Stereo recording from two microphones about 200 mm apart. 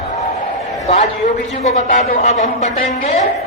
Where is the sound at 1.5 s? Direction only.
35° left (ahead or behind).